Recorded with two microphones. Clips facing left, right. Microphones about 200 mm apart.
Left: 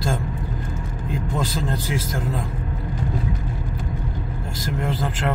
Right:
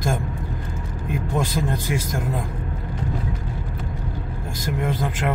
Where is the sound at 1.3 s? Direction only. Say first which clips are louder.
Right 2 dB; 15° right (ahead or behind).